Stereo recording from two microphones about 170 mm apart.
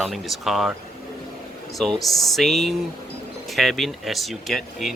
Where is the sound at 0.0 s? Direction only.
Centre (ahead or behind).